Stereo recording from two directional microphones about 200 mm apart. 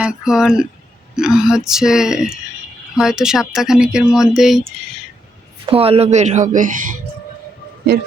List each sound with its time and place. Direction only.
0.0 s speech: 5° right (ahead or behind)
5.6 s a woman's voice: 30° right (ahead or behind)